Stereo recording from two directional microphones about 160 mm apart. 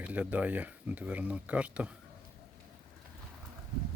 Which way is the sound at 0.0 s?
10° right (ahead or behind).